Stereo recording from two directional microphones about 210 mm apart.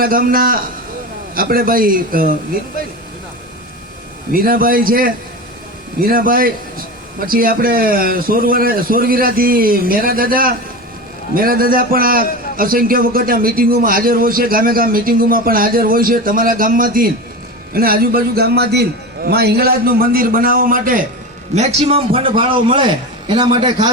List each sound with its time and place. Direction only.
0.0 s a man's voice: 45° right (ahead or behind)
4.3 s a man's voice: 45° right (ahead or behind)
21.5 s a man's voice: 30° right (ahead or behind)